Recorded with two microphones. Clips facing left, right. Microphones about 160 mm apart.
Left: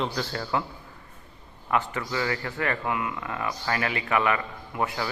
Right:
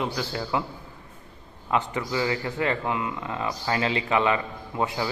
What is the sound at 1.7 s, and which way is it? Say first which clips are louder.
A man's voice: right 1 dB; 20° right (ahead or behind).